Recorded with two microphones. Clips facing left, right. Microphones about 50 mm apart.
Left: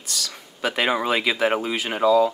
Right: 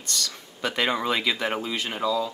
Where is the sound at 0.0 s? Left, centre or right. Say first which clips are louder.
Even; centre.